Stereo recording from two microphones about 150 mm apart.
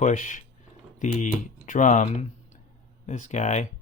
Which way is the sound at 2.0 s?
50° left (ahead or behind).